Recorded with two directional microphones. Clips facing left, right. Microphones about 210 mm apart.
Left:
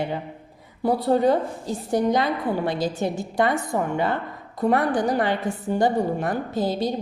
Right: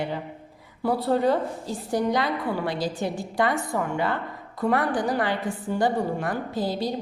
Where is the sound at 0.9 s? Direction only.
15° left (ahead or behind).